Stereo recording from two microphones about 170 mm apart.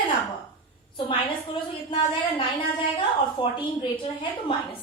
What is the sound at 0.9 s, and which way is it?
A woman's voice, 30° left (ahead or behind).